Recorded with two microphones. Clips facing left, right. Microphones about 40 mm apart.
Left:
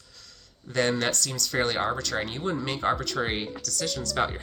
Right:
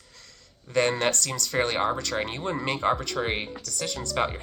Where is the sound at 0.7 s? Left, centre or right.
Right.